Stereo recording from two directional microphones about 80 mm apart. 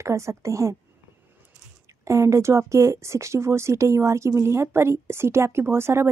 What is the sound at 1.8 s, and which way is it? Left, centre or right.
Speech, right.